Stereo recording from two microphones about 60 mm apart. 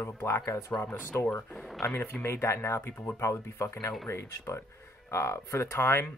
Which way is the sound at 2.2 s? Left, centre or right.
Left.